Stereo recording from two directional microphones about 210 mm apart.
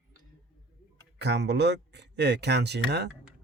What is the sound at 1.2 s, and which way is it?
Speech, 55° right (ahead or behind).